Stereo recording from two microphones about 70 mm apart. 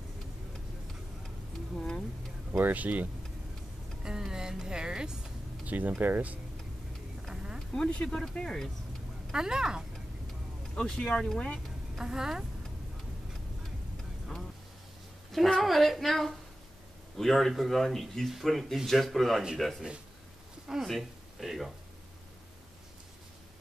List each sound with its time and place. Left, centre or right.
1.8 s speech: centre
2.5 s speech: right
4.0 s speech: centre
5.7 s speech: right
7.2 s insect: centre
7.7 s speech: centre
9.3 s speech: centre
10.7 s speech: centre
12.0 s speech: centre
15.3 s speech: centre